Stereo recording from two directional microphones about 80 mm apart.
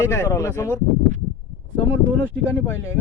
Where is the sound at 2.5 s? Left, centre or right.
Left.